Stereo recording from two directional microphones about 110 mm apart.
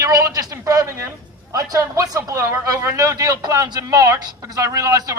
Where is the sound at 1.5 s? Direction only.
30° right (ahead or behind).